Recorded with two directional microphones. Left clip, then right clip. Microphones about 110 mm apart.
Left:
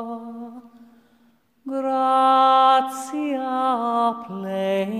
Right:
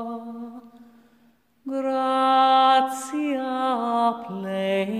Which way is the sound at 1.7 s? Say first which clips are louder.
Left 4 dB; 25° left (ahead or behind).